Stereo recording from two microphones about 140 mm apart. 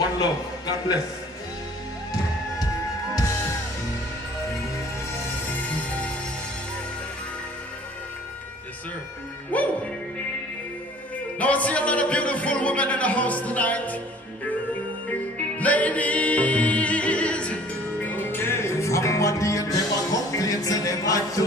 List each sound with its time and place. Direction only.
0.2 s a man's voice: 30° left (ahead or behind)
9.5 s music: 10° left (ahead or behind)
11.3 s music: 10° left (ahead or behind)
15.3 s music: 10° left (ahead or behind)